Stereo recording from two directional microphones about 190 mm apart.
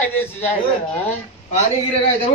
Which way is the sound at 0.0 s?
10° left (ahead or behind).